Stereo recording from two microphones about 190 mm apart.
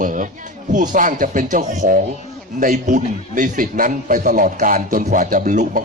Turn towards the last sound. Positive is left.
turn(degrees=-40)  # may be behind; listen again after turning